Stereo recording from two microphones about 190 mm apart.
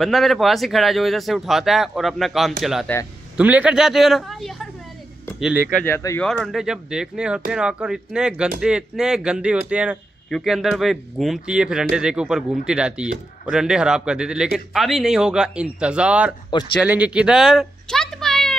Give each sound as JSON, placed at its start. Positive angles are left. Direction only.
{"t": 0.0, "sound": "speech", "side_deg": 0}
{"t": 5.8, "sound": "speech", "side_deg": 10}
{"t": 16.8, "sound": "a sound", "side_deg": -5}